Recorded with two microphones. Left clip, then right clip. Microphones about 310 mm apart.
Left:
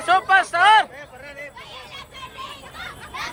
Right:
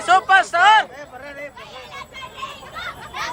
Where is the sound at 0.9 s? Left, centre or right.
Right.